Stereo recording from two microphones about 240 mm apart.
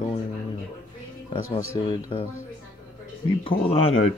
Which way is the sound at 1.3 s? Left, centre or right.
Left.